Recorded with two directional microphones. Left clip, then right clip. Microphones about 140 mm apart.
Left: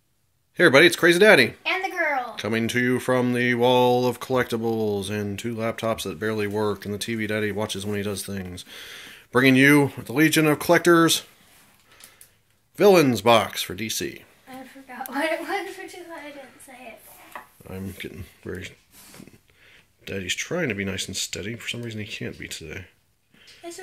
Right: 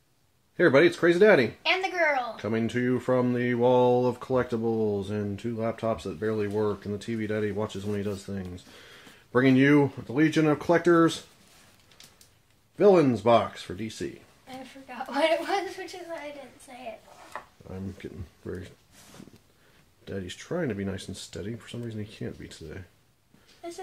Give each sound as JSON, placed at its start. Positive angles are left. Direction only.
{"t": 0.6, "sound": "speech", "side_deg": 20}
{"t": 12.7, "sound": "speech", "side_deg": 20}
{"t": 17.6, "sound": "speech", "side_deg": 20}
{"t": 20.1, "sound": "speech", "side_deg": 15}
{"t": 20.9, "sound": "speech", "side_deg": 5}